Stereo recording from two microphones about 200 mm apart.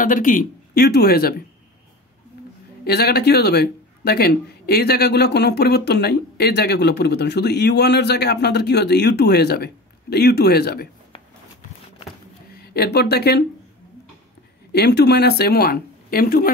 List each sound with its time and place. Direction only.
0.0 s speech: 45° left (ahead or behind)
2.8 s speech: 50° left (ahead or behind)
12.5 s speech: 50° left (ahead or behind)
14.7 s speech: 55° left (ahead or behind)